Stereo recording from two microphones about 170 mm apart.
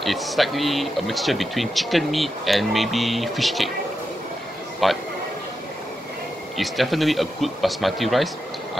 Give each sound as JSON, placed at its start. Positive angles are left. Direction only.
{"t": 0.0, "sound": "speech", "side_deg": 0}
{"t": 4.8, "sound": "speech", "side_deg": 0}
{"t": 6.5, "sound": "speech", "side_deg": 0}